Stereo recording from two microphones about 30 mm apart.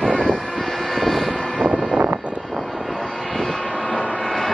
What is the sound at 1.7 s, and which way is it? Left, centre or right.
Vehicle, centre.